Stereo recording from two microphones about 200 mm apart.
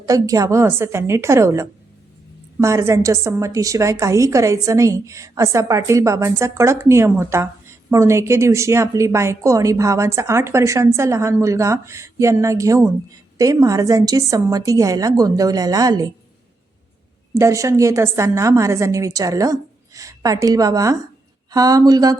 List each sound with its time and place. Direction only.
0.0 s a woman's voice: 15° right (ahead or behind)
17.3 s a woman's voice: 15° right (ahead or behind)